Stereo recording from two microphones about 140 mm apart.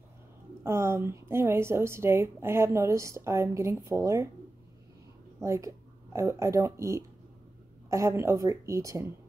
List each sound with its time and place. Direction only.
0.7 s a woman's voice: 20° right (ahead or behind)
5.4 s a woman's voice: 20° right (ahead or behind)